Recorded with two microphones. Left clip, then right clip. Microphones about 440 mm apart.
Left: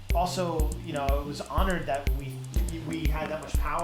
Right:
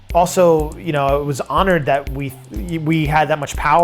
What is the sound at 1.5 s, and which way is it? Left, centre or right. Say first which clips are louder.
Speech: right 14 dB; right.